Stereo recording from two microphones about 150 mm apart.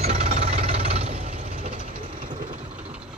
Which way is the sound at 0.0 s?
45° right (ahead or behind).